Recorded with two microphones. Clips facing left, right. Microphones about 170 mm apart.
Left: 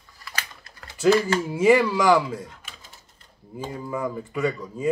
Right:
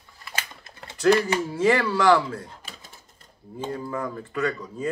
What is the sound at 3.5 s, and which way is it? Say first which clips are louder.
Speech: even; 10° left (ahead or behind).